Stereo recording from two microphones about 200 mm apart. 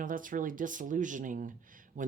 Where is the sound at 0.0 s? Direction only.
40° right (ahead or behind).